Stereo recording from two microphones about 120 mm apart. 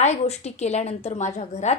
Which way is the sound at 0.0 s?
65° left (ahead or behind).